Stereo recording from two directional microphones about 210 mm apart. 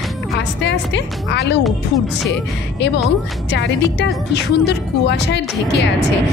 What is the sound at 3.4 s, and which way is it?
Speech, 55° left (ahead or behind).